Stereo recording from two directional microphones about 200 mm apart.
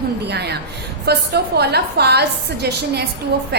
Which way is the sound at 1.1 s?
55° right (ahead or behind).